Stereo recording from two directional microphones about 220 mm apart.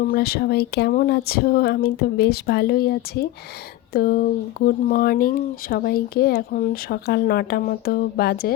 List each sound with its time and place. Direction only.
0.1 s speech: 45° left (ahead or behind)